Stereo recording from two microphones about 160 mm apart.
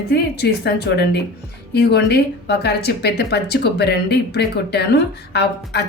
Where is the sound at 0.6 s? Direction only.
90° left.